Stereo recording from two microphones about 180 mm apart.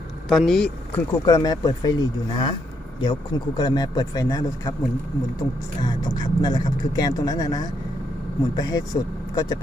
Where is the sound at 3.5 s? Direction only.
25° left (ahead or behind).